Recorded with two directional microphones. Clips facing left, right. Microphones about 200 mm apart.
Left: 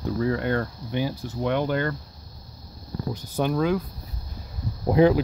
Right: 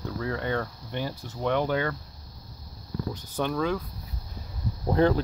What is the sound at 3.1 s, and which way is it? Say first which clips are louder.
Speech: left 5 dB; 10° left (ahead or behind).